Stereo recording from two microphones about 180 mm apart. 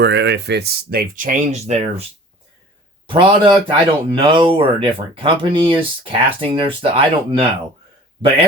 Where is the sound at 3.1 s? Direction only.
30° right (ahead or behind).